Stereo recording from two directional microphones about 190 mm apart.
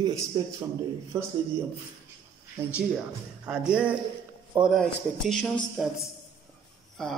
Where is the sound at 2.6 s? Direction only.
10° right (ahead or behind).